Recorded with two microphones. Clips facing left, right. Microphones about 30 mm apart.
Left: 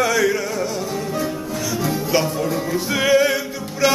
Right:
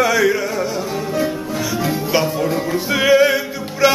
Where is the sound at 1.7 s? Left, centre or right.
Centre.